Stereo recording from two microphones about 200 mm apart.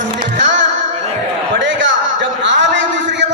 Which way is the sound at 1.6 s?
65° right (ahead or behind).